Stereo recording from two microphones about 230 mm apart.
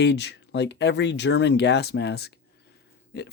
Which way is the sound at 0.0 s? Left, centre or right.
Left.